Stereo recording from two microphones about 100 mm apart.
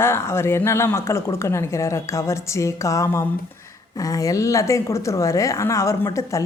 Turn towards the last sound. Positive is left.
turn(degrees=30)  # may be behind; listen again after turning